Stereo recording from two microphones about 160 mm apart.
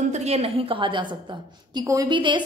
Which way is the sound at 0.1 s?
45° right (ahead or behind).